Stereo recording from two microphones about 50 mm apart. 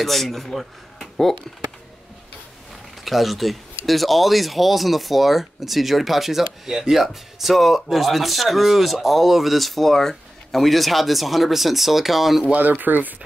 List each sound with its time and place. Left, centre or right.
0.0 s speech: centre
3.0 s speech: centre
12.5 s speech: right